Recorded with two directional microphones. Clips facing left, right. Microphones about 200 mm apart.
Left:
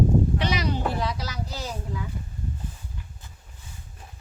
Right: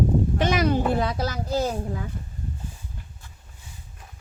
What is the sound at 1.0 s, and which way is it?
Speech, 50° right (ahead or behind).